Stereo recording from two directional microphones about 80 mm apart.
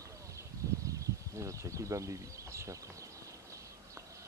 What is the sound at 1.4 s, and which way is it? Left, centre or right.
Speech, right.